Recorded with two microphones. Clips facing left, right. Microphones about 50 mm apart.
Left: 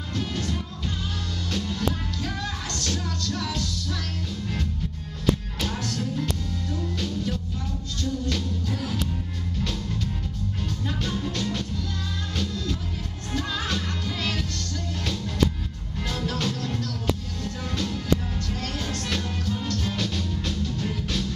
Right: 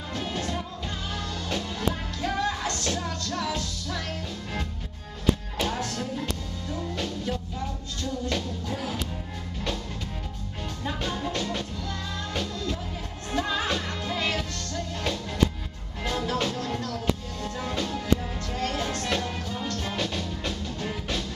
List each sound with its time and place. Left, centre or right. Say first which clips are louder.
0.1 s music: left 1 dB; centre
5.6 s music: right 1 dB; centre
10.9 s music: right 1 dB; centre
13.3 s music: right 2 dB; centre
16.1 s music: right 1 dB; centre